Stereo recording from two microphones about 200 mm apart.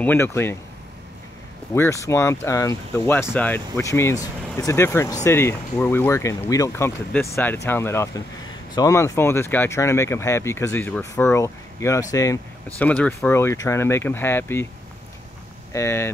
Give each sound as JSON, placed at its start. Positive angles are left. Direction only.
{"t": 0.0, "sound": "speech", "side_deg": 10}
{"t": 1.7, "sound": "speech", "side_deg": 15}
{"t": 15.7, "sound": "speech", "side_deg": 15}